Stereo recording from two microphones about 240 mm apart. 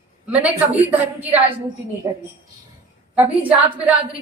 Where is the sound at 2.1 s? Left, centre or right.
Centre.